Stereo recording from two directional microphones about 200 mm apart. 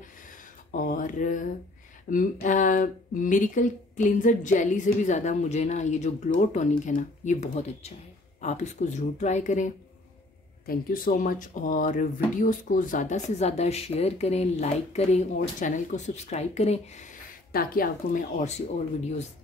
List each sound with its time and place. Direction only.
0.7 s speech: 40° left (ahead or behind)
10.7 s speech: 45° left (ahead or behind)
17.5 s speech: 50° left (ahead or behind)